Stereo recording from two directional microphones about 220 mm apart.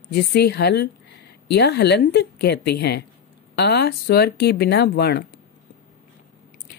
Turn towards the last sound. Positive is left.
turn(degrees=50)  # may be behind; listen again after turning